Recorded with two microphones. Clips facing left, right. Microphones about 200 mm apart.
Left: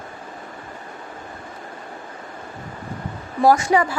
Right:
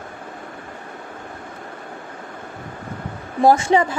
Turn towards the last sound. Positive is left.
turn(degrees=-25)  # may be behind; listen again after turning